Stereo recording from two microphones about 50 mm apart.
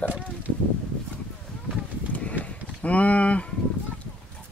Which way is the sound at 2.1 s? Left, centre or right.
Left.